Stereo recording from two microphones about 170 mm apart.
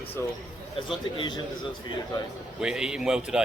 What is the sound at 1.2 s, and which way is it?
Speech, 30° left (ahead or behind).